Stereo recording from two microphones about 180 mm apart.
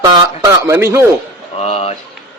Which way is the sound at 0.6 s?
15° right (ahead or behind).